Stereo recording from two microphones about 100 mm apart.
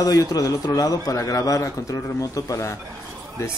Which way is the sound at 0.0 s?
35° left (ahead or behind).